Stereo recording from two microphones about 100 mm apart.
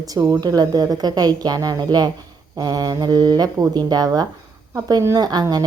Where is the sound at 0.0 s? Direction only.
40° right (ahead or behind).